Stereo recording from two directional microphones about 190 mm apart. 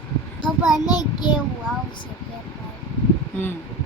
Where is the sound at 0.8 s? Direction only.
20° left (ahead or behind).